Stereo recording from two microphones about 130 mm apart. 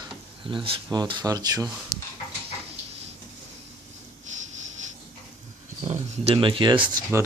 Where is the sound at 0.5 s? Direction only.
35° right (ahead or behind).